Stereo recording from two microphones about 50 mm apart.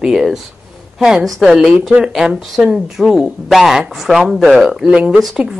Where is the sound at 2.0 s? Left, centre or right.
Centre.